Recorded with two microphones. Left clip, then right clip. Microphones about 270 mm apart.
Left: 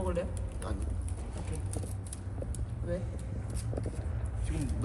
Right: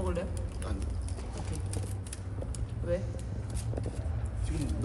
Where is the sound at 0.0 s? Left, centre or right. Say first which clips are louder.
Left 1 dB; centre.